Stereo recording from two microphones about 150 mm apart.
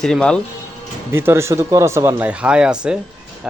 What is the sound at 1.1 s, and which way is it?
Speech, 15° right (ahead or behind).